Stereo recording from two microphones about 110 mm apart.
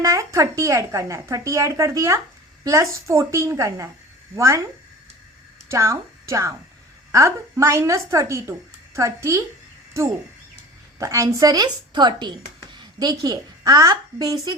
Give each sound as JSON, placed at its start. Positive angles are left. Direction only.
{"t": 0.0, "sound": "a woman's voice", "side_deg": -30}
{"t": 5.6, "sound": "a woman's voice", "side_deg": -25}
{"t": 11.0, "sound": "a woman's voice", "side_deg": -30}